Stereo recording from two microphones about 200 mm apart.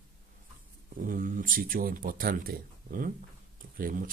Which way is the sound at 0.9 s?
45° right (ahead or behind).